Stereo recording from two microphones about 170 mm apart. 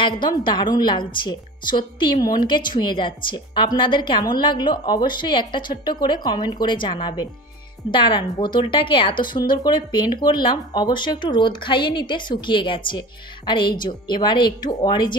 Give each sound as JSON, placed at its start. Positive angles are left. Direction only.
{"t": 0.0, "sound": "a woman's voice", "side_deg": 25}